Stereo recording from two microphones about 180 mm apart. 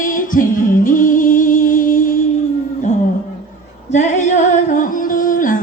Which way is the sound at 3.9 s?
40° left (ahead or behind).